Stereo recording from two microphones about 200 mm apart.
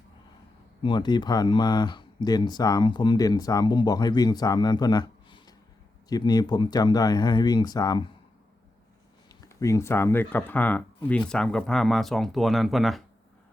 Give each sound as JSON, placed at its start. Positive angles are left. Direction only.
{"t": 0.8, "sound": "speech", "side_deg": 20}
{"t": 9.3, "sound": "speech", "side_deg": 15}